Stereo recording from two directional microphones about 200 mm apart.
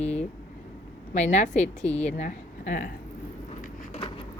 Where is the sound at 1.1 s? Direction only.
35° left (ahead or behind).